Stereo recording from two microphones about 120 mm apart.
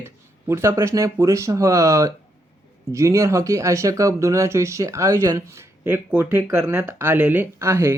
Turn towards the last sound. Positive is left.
turn(degrees=-20)  # may be behind; listen again after turning